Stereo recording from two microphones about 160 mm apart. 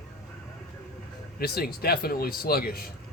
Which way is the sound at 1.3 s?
70° left (ahead or behind).